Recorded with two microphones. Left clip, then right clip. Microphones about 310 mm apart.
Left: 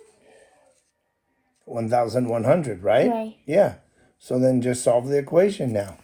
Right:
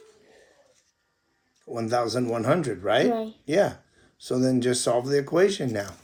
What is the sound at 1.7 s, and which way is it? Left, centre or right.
Speech, left.